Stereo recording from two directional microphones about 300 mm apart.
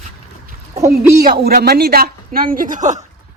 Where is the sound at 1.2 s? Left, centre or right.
Right.